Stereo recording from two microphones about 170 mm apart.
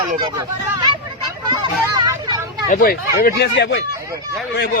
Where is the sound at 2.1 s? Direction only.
20° right (ahead or behind).